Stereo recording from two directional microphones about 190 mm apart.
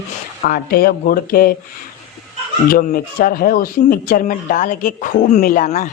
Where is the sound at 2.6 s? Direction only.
50° left (ahead or behind).